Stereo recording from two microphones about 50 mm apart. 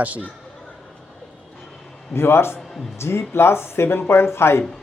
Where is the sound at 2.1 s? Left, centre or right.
Left.